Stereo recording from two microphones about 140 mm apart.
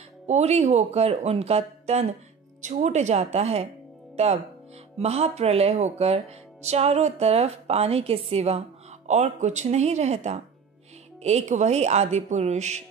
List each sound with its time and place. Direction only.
0.3 s speech: 50° right (ahead or behind)